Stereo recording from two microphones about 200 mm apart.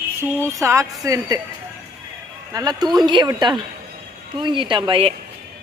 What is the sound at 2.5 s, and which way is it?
Speech, 20° right (ahead or behind).